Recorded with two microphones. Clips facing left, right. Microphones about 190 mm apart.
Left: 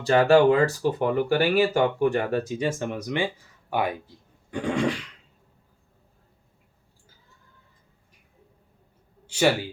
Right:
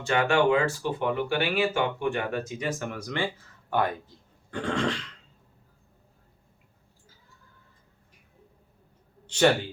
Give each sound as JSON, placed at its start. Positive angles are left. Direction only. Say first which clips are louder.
{"t": 0.0, "sound": "speech", "louder": "left 6 dB", "side_deg": 35}
{"t": 4.5, "sound": "a sound", "louder": "left 3 dB", "side_deg": 10}
{"t": 9.2, "sound": "a man's voice", "louder": "even", "side_deg": 5}